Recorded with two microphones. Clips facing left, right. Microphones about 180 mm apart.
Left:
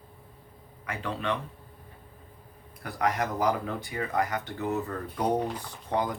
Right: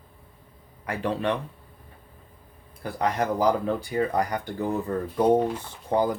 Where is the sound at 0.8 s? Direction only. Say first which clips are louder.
Right 6 dB; 35° right (ahead or behind).